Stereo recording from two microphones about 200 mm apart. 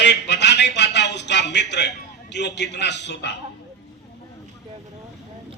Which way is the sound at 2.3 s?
60° left (ahead or behind).